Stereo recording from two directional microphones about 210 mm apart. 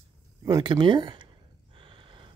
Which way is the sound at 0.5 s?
20° right (ahead or behind).